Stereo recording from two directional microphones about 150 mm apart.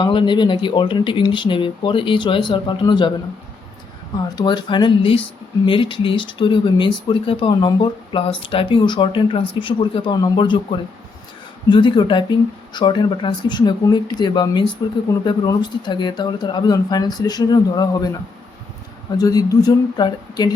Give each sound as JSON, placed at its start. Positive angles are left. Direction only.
{"t": 0.0, "sound": "speech", "side_deg": 30}
{"t": 4.2, "sound": "speech", "side_deg": 30}
{"t": 19.1, "sound": "speech", "side_deg": 25}